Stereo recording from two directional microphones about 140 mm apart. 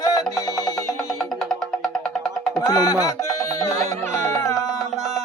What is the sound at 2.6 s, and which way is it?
Music, 25° left (ahead or behind).